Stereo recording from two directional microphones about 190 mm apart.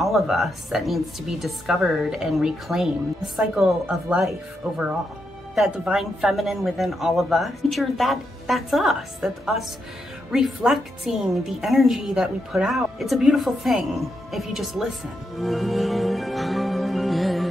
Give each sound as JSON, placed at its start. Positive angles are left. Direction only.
{"t": 0.0, "sound": "a woman's voice", "side_deg": 0}
{"t": 15.3, "sound": "music", "side_deg": 0}